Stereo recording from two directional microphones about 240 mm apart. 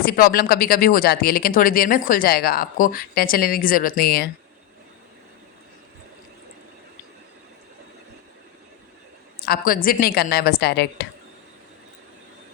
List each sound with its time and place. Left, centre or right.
0.0 s speech: left
9.4 s speech: left